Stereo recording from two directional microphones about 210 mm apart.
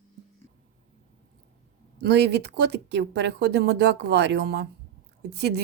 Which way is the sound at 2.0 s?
55° right (ahead or behind).